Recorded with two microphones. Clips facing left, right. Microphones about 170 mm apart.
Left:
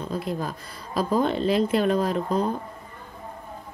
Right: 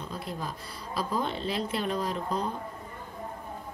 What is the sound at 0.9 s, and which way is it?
Speech, 50° left (ahead or behind).